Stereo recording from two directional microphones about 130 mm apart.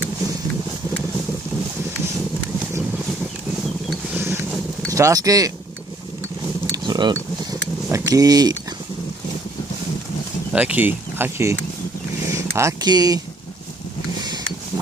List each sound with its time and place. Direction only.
4.8 s speech: 25° right (ahead or behind)
6.7 s mechanisms: 30° right (ahead or behind)
7.9 s speech: 25° right (ahead or behind)
10.5 s speech: 10° right (ahead or behind)
12.3 s a sound: 20° right (ahead or behind)